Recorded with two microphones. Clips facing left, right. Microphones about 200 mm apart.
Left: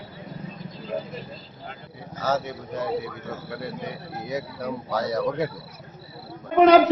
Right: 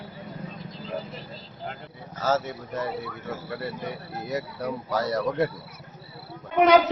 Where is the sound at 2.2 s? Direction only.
Centre (ahead or behind).